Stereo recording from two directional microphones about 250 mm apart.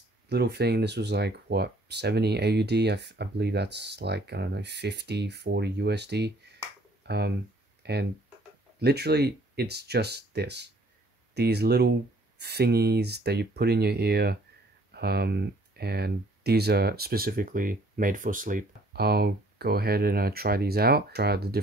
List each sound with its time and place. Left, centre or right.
0.3 s speech: right